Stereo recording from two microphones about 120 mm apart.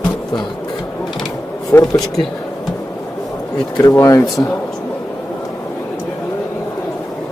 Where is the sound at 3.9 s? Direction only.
20° left (ahead or behind).